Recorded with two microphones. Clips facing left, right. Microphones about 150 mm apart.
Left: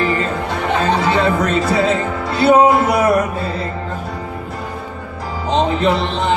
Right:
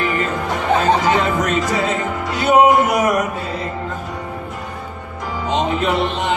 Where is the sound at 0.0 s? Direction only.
30° left (ahead or behind).